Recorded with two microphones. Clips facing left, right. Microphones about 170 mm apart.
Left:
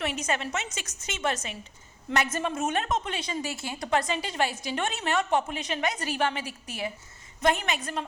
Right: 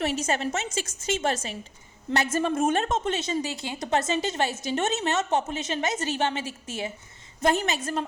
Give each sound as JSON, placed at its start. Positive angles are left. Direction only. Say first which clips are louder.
{"t": 0.0, "sound": "a woman's voice", "louder": "right 4 dB", "side_deg": -35}